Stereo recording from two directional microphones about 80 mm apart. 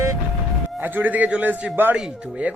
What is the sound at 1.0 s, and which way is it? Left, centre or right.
Speech, right.